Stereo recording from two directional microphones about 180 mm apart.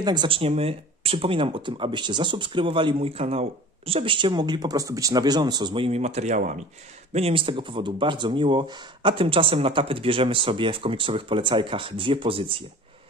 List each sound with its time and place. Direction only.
0.0 s speech: 25° right (ahead or behind)